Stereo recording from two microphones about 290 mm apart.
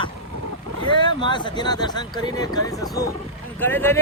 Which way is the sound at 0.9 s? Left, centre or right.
Centre.